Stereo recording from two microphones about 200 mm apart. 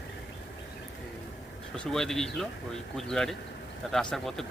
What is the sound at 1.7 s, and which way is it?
A man's voice, 5° left (ahead or behind).